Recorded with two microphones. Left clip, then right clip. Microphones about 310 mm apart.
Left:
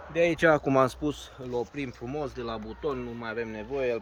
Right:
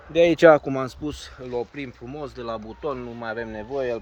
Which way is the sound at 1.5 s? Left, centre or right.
Centre.